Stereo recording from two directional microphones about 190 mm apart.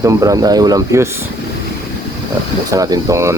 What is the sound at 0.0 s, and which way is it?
Speech, 15° right (ahead or behind).